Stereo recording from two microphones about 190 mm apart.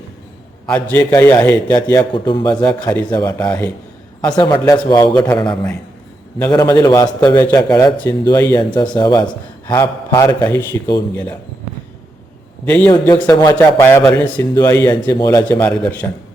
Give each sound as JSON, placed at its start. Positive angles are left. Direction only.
{"t": 0.7, "sound": "a man's voice", "side_deg": 10}
{"t": 12.6, "sound": "speech", "side_deg": 10}
{"t": 15.6, "sound": "speech", "side_deg": 5}